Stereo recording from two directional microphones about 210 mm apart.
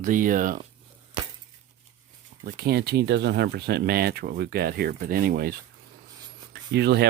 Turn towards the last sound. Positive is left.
turn(degrees=-50)  # may be behind; listen again after turning